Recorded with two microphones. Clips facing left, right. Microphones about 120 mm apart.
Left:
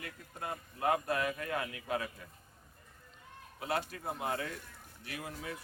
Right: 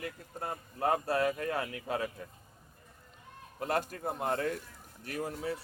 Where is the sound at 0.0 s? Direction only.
35° right (ahead or behind).